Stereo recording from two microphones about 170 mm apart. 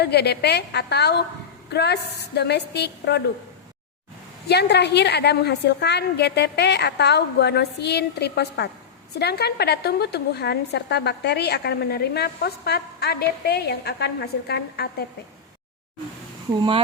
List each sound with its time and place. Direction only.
0.0 s a woman's voice: 75° left (ahead or behind)
4.4 s a woman's voice: 80° left
16.6 s speech: 30° right (ahead or behind)